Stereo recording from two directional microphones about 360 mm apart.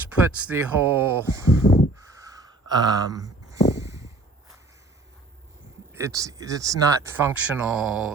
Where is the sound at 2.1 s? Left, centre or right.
Centre.